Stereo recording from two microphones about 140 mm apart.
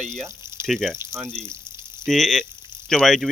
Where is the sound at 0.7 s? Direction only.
5° left (ahead or behind).